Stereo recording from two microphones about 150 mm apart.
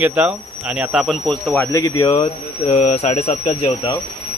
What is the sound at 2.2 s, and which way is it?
Speech, 45° left (ahead or behind).